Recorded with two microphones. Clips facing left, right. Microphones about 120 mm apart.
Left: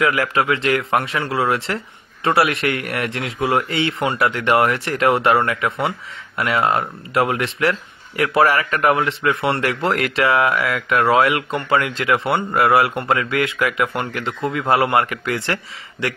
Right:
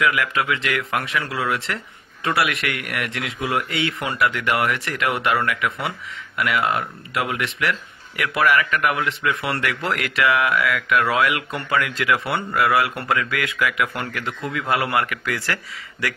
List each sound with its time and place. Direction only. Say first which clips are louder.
0.0 s speech: left 3 dB; 35° left (ahead or behind)